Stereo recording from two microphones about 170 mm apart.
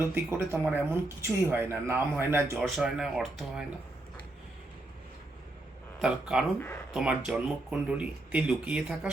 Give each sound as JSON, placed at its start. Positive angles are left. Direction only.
{"t": 0.0, "sound": "speech", "side_deg": -15}
{"t": 2.6, "sound": "speech", "side_deg": 0}
{"t": 6.0, "sound": "speech", "side_deg": -5}